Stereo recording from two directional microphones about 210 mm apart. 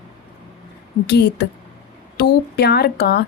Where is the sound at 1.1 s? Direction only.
50° left (ahead or behind).